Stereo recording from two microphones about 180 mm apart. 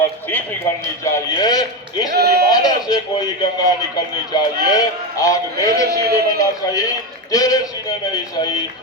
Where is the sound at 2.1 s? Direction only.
60° right (ahead or behind).